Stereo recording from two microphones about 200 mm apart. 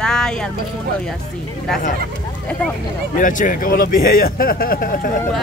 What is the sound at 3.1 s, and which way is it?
A man's voice, 40° left (ahead or behind).